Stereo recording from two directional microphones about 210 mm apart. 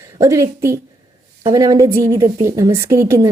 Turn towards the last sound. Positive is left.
turn(degrees=-15)  # may be behind; listen again after turning